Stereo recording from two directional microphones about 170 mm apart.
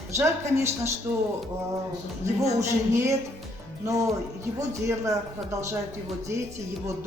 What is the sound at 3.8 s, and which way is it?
A man's voice, 20° right (ahead or behind).